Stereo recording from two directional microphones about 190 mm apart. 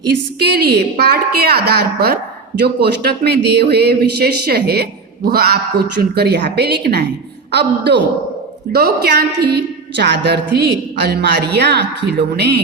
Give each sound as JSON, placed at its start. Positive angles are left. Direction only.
{"t": 0.3, "sound": "a woman's voice", "side_deg": -55}